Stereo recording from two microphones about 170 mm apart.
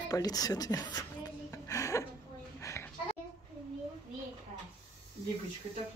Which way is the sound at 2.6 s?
15° left (ahead or behind).